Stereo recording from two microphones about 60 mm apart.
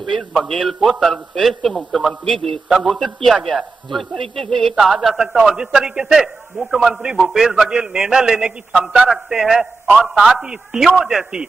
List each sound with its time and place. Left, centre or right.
0.4 s a man's voice: centre; by 8.1 s right
8.1 s a man's voice: centre